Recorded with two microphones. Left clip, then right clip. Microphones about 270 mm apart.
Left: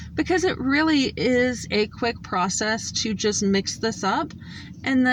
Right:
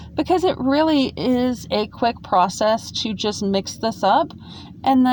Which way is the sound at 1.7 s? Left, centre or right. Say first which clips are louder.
Right 3 dB; right.